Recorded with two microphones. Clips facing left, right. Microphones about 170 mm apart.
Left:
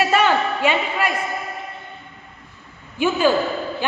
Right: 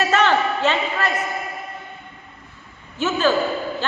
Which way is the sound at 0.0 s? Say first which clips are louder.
Even; 10° left (ahead or behind).